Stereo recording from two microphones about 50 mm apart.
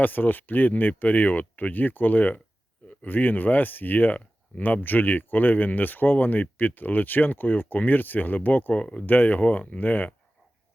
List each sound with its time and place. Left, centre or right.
0.0 s speech: left
8.7 s speech: left
9.0 s speech: left